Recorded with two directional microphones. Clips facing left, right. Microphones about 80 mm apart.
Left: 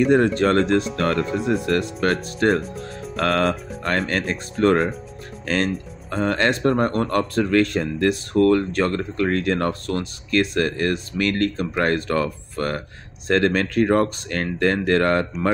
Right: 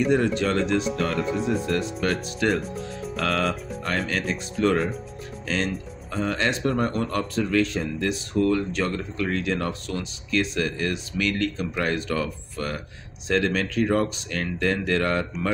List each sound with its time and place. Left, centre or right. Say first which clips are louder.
0.0 s speech: left 5 dB; left
1.2 s speech: left 1 dB; centre
2.0 s speech: left 5 dB; left